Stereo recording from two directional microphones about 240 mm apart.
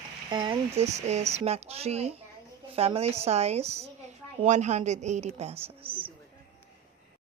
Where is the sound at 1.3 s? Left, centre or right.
Right.